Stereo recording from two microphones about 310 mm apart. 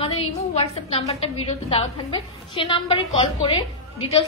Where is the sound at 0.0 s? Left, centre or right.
Centre.